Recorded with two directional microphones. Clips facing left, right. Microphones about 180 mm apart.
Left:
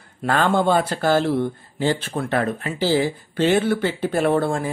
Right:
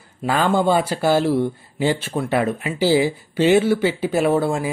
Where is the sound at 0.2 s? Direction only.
5° right (ahead or behind).